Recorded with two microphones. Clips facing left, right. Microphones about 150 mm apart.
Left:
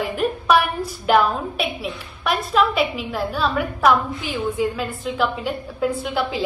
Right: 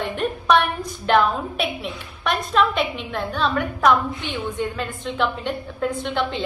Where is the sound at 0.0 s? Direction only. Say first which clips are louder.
Left 2 dB; 5° left (ahead or behind).